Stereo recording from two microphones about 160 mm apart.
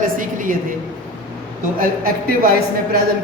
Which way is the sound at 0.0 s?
55° right (ahead or behind).